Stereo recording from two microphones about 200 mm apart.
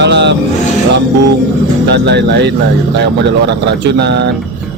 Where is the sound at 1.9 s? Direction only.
60° right (ahead or behind).